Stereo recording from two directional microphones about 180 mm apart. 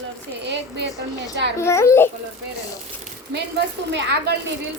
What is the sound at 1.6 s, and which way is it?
Speech, 15° left (ahead or behind).